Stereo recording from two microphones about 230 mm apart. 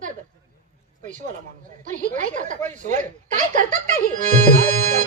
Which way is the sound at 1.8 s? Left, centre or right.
Right.